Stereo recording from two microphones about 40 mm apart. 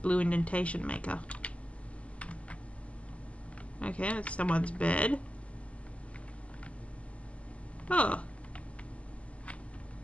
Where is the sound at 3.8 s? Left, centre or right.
Left.